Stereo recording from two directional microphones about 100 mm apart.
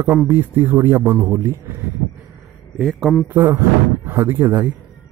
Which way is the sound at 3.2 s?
25° right (ahead or behind).